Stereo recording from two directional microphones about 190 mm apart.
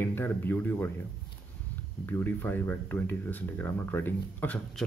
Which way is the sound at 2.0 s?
10° left (ahead or behind).